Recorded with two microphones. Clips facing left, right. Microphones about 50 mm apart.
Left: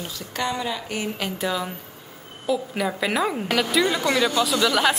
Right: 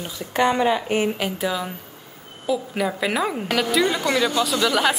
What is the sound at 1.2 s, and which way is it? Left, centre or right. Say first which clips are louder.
Speech: right 2 dB; centre.